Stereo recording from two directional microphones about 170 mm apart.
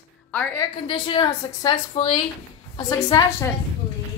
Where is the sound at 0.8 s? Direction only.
30° left (ahead or behind).